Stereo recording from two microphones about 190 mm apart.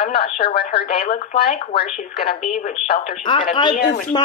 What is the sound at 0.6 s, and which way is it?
Speech, 55° left (ahead or behind).